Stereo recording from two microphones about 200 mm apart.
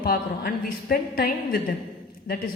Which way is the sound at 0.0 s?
45° left (ahead or behind).